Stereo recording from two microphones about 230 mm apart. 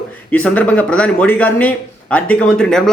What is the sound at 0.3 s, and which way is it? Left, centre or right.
Speech, centre.